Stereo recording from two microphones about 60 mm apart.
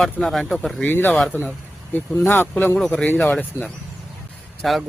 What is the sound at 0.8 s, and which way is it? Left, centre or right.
Speech, left.